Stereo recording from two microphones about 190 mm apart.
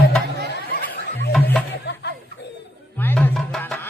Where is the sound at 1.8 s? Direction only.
65° left (ahead or behind).